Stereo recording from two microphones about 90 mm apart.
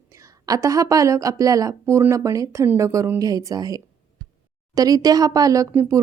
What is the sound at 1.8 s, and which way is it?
A woman's voice, 30° right (ahead or behind).